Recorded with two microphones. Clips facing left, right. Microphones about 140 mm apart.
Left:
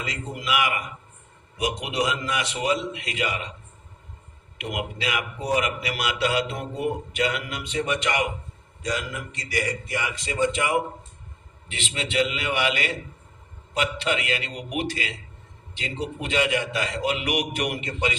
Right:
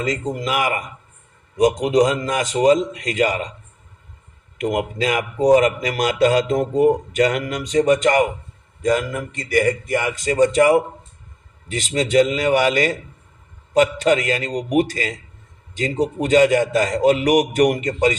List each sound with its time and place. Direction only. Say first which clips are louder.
0.0 s a man's voice: right 9 dB; 40° right (ahead or behind)
4.5 s a man's voice: right 9 dB; 45° right (ahead or behind)